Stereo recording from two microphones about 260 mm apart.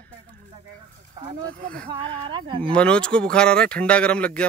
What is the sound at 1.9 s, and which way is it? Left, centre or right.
Speech, centre.